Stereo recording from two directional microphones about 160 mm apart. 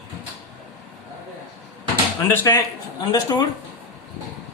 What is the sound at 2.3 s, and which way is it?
Speech, 15° left (ahead or behind).